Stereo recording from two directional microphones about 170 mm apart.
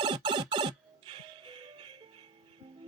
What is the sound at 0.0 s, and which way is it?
Music, 30° right (ahead or behind).